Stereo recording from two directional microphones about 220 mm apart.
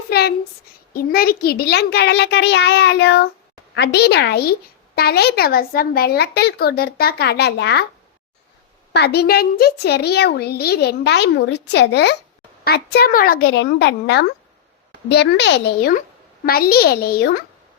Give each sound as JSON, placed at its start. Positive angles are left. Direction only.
{"t": 0.1, "sound": "a sound", "side_deg": 45}
{"t": 0.9, "sound": "a woman's voice", "side_deg": 45}
{"t": 8.9, "sound": "a woman's voice", "side_deg": 50}